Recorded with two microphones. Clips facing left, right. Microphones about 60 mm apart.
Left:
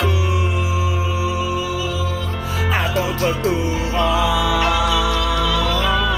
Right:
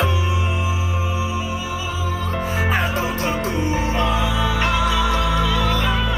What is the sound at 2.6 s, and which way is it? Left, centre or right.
Music, right.